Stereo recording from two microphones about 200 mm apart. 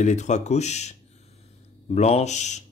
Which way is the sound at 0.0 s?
35° left (ahead or behind).